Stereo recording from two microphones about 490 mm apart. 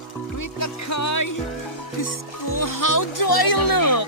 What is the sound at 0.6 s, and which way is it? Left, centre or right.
Music, left.